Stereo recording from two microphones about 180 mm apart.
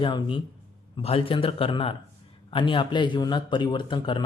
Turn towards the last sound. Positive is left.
turn(degrees=25)  # may be behind; listen again after turning